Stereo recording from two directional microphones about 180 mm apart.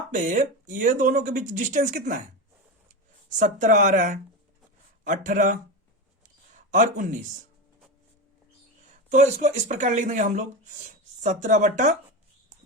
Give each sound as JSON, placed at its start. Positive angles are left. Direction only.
{"t": 0.1, "sound": "speech", "side_deg": -45}
{"t": 3.2, "sound": "speech", "side_deg": -45}
{"t": 6.7, "sound": "speech", "side_deg": -45}
{"t": 9.0, "sound": "speech", "side_deg": -40}